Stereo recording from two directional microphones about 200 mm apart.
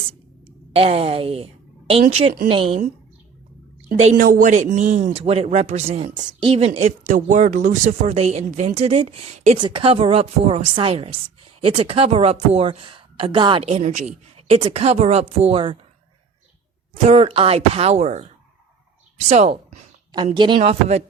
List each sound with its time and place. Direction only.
0.4 s speech: 30° right (ahead or behind)
3.9 s speech: 35° right (ahead or behind)
17.0 s speech: 30° right (ahead or behind)